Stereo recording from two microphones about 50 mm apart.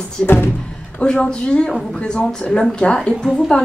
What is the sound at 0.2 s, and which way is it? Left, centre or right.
A woman's voice, centre.